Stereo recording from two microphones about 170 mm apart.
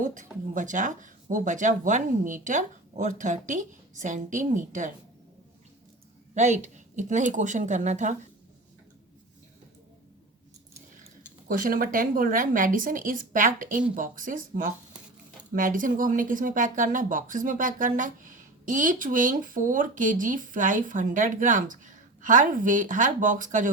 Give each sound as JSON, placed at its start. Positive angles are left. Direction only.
{"t": 0.0, "sound": "speech", "side_deg": -50}
{"t": 6.3, "sound": "speech", "side_deg": -45}
{"t": 11.4, "sound": "speech", "side_deg": -55}